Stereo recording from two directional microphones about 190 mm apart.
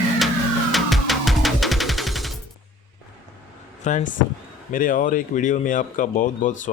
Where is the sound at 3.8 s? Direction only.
40° left (ahead or behind).